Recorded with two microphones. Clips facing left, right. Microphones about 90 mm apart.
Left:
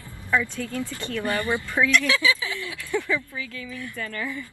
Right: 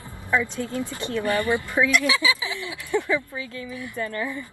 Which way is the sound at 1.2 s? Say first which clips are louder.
Right 3 dB; 20° left (ahead or behind).